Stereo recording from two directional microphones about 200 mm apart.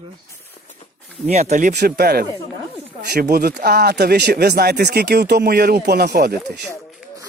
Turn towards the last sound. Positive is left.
turn(degrees=-55)  # may be behind; listen again after turning